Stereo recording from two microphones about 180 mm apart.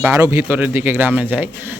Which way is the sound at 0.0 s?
15° right (ahead or behind).